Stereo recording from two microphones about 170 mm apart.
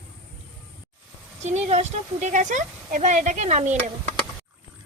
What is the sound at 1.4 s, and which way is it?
Speech, 40° right (ahead or behind).